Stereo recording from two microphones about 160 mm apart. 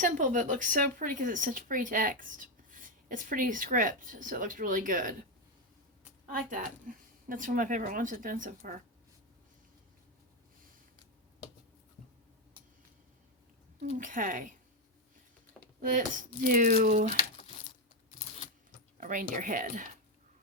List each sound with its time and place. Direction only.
0.0 s speech: 55° right (ahead or behind)
6.2 s speech: 60° right (ahead or behind)
14.0 s speech: 55° right (ahead or behind)
15.8 s speech: 55° right (ahead or behind)
18.9 s speech: 55° right (ahead or behind)